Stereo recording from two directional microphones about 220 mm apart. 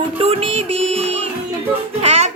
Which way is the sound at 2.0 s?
30° right (ahead or behind).